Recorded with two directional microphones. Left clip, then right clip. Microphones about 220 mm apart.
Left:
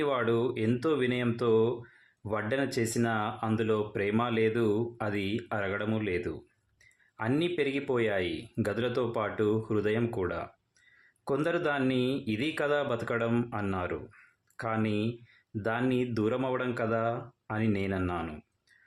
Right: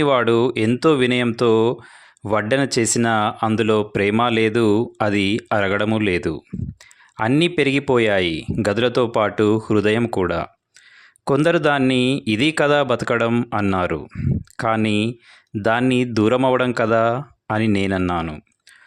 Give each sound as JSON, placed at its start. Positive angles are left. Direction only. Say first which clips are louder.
{"t": 0.0, "sound": "speech", "louder": "right 12 dB", "side_deg": -45}